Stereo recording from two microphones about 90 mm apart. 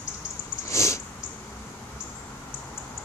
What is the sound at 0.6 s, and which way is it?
Sniff, 35° left (ahead or behind).